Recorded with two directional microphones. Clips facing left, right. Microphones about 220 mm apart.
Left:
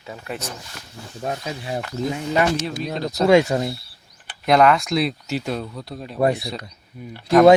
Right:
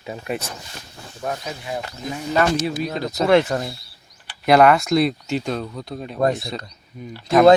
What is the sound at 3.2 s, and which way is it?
Speech, 15° left (ahead or behind).